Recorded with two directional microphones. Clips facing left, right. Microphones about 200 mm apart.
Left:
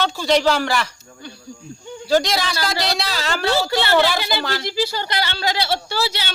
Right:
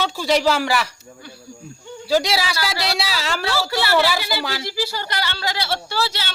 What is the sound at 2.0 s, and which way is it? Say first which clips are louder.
Speech: left 1 dB; 5° right (ahead or behind).